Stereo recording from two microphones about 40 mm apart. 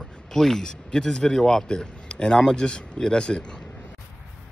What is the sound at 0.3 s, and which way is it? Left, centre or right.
A man's voice, centre.